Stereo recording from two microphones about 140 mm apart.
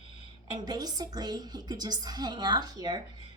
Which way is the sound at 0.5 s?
30° right (ahead or behind).